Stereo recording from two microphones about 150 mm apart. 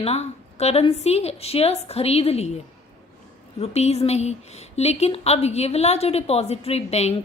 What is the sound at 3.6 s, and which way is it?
Speech, 45° left (ahead or behind).